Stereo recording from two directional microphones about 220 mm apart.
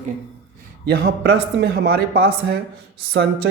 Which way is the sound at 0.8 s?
50° right (ahead or behind).